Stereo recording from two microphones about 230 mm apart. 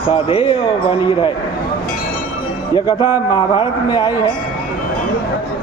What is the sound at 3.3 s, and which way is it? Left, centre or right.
Speech, centre.